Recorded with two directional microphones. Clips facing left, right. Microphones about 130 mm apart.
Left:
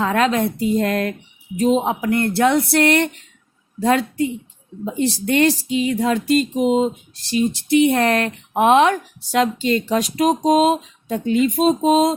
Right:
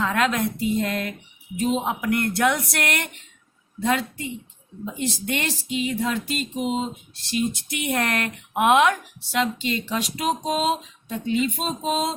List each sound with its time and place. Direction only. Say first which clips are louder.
0.0 s speech: left 5 dB; 35° left (ahead or behind)